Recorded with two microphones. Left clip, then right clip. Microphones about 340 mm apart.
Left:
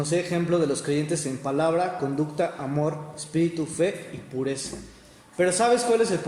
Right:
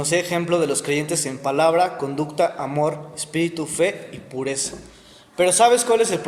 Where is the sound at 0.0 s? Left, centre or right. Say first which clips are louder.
Right 5 dB; right.